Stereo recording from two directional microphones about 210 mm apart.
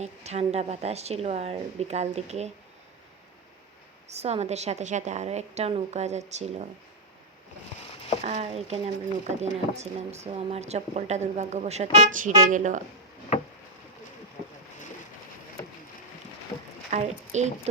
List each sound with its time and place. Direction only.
0.0 s a woman's voice: 30° right (ahead or behind)
4.1 s a woman's voice: 30° right (ahead or behind)
8.2 s a woman's voice: 30° right (ahead or behind)
16.9 s a woman's voice: 35° right (ahead or behind)